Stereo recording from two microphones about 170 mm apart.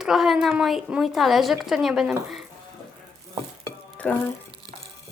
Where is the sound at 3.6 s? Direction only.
10° left (ahead or behind).